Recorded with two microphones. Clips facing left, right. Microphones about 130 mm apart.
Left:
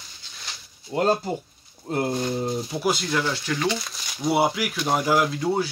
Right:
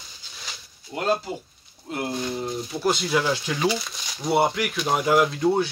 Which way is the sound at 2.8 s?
Centre (ahead or behind).